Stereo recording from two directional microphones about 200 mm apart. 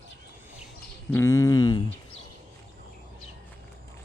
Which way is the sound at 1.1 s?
15° left (ahead or behind).